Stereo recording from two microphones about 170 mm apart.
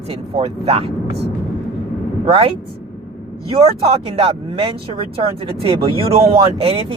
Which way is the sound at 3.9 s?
35° right (ahead or behind).